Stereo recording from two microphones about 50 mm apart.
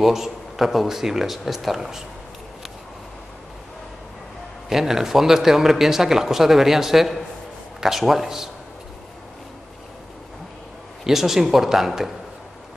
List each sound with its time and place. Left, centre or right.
0.0 s speech: centre
4.6 s speech: centre
11.1 s speech: centre